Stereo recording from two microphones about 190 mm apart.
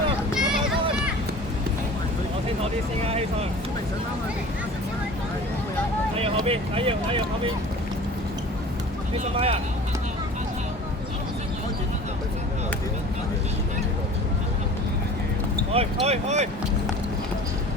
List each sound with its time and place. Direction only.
0.3 s a sound: 5° right (ahead or behind)
6.1 s speech: 30° right (ahead or behind)
9.2 s speech: 35° right (ahead or behind)
15.7 s speech: 30° right (ahead or behind)